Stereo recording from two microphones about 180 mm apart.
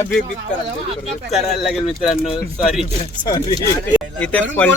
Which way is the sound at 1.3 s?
Centre (ahead or behind).